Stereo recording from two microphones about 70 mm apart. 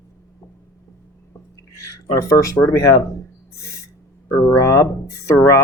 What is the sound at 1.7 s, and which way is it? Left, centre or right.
Speech, left.